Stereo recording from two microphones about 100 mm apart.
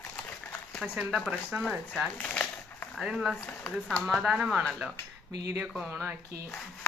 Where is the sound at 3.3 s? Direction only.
10° left (ahead or behind); by 5.9 s 5° right (ahead or behind).